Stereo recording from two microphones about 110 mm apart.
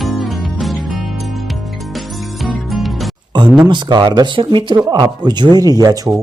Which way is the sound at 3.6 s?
45° right (ahead or behind).